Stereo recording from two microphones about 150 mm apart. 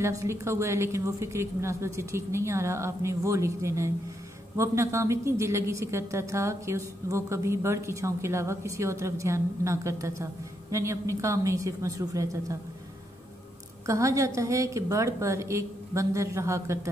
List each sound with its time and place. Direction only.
0.0 s a woman's voice: 20° right (ahead or behind)
13.8 s a woman's voice: 20° right (ahead or behind)